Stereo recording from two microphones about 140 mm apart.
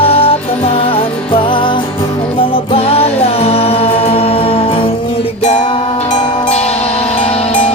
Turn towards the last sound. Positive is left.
turn(degrees=50)  # may be behind; listen again after turning